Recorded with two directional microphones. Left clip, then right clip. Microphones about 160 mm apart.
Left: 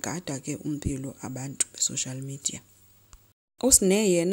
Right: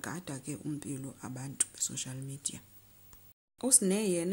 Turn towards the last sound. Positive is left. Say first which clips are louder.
# left 9 dB
turn(degrees=40)  # may be behind; listen again after turning